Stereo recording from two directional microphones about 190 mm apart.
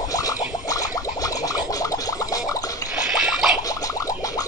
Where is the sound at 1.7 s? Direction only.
20° left (ahead or behind).